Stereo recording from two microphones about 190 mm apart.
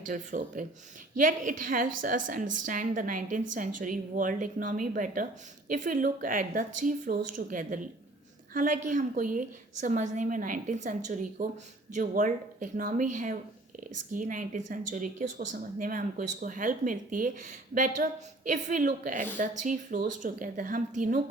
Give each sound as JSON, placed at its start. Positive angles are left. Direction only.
{"t": 0.1, "sound": "a woman's voice", "side_deg": -45}